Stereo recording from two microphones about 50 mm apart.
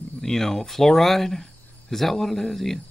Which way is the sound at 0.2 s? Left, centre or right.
Centre.